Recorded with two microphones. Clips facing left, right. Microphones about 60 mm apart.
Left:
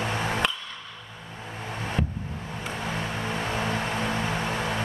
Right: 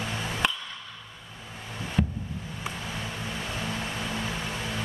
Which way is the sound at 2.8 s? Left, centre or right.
Left.